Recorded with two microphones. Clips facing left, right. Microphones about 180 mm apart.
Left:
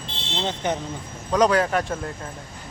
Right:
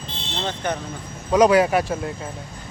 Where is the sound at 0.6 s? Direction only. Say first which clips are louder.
Left 1 dB; 20° left (ahead or behind).